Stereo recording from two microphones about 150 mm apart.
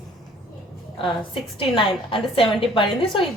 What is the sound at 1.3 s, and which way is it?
A woman's voice, 35° left (ahead or behind).